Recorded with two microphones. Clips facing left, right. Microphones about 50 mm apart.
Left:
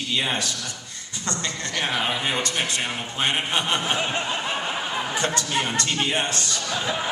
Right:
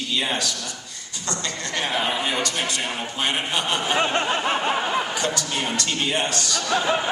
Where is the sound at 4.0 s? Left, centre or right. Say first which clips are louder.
Right 4 dB; right.